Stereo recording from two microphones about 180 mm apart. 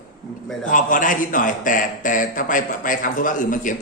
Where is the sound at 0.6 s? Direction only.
45° left (ahead or behind).